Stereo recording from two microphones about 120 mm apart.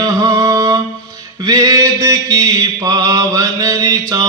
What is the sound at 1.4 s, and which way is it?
Mantra, 30° right (ahead or behind).